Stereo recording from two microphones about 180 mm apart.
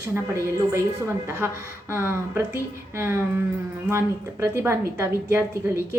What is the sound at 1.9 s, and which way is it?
A woman's voice, 10° right (ahead or behind).